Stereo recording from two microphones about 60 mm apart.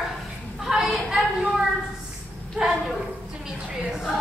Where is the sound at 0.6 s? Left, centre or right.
Centre.